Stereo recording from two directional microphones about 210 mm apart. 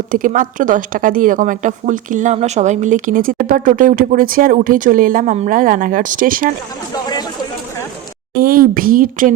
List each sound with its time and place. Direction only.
0.1 s a woman's voice: 40° right (ahead or behind)
6.9 s a sound: 20° left (ahead or behind)
8.4 s speech: 45° right (ahead or behind)